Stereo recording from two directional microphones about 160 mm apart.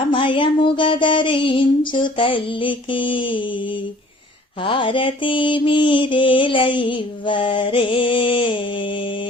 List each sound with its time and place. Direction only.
0.1 s mantra: 30° left (ahead or behind)
4.6 s mantra: 35° left (ahead or behind)